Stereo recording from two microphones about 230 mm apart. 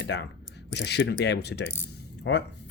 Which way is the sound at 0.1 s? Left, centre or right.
Left.